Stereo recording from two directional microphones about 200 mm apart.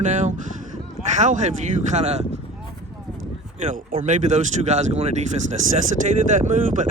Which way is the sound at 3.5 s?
40° right (ahead or behind).